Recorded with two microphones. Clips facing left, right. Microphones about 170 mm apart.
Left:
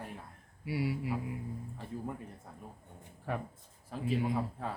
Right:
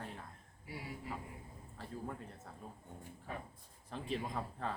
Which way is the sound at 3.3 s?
85° left.